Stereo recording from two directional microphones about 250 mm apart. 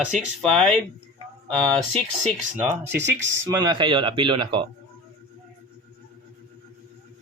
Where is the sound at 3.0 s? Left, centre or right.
Centre.